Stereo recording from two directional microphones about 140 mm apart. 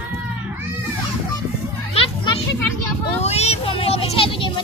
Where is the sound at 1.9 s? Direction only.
40° left (ahead or behind).